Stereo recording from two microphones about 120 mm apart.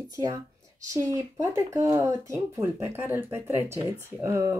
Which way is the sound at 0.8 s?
25° right (ahead or behind).